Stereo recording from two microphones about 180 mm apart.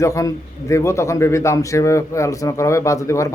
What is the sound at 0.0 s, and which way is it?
A man's voice, 15° left (ahead or behind).